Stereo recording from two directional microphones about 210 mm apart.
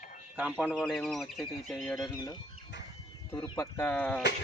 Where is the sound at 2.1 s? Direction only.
15° left (ahead or behind).